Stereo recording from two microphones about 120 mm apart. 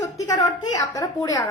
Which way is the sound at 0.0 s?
25° left (ahead or behind).